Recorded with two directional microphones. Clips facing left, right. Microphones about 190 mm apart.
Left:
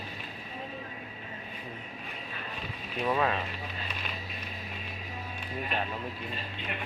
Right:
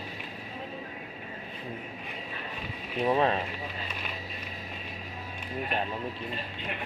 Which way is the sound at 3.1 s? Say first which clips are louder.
Right 3 dB; 30° right (ahead or behind).